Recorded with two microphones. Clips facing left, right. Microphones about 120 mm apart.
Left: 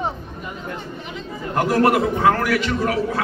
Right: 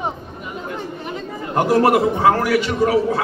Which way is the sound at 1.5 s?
20° right (ahead or behind).